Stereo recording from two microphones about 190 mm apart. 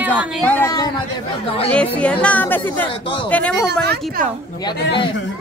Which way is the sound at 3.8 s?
60° right (ahead or behind).